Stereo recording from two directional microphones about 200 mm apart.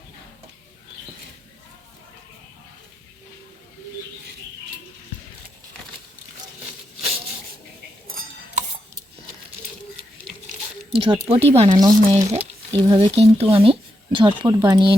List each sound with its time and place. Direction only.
8.0 s cutlery: 45° right (ahead or behind)
10.9 s speech: 30° right (ahead or behind)